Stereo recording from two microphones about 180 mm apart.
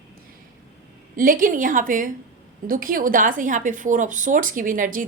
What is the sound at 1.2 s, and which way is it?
A woman's voice, 50° right (ahead or behind).